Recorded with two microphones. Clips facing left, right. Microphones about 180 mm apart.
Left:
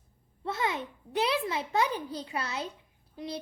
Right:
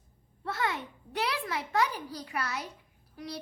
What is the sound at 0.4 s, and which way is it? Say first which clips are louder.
A child's voice: left 1 dB; 20° left (ahead or behind).